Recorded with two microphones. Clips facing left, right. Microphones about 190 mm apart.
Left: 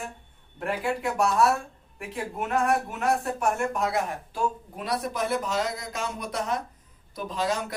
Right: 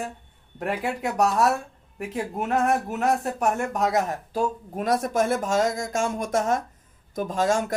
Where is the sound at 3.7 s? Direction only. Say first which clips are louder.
Right 4 dB; 40° right (ahead or behind).